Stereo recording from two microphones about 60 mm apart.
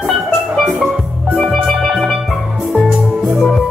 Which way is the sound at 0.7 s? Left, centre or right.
Right.